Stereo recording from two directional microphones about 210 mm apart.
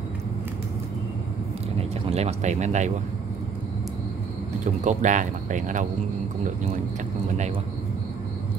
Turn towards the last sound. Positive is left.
turn(degrees=-35)  # may be behind; listen again after turning